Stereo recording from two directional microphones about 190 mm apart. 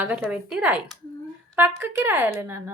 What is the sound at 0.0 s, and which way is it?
A woman's voice, 5° right (ahead or behind).